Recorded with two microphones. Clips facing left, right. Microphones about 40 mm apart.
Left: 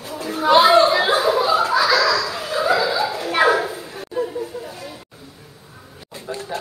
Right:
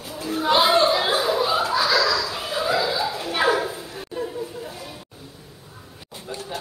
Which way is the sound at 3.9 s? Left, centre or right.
Centre.